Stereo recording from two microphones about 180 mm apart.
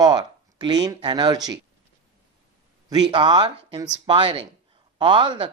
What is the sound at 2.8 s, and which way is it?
Speech, 25° right (ahead or behind).